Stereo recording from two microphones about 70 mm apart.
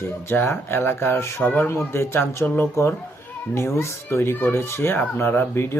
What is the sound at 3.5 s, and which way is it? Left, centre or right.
Speech, left.